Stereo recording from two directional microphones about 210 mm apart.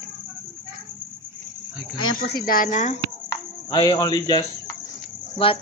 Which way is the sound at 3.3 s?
20° left (ahead or behind).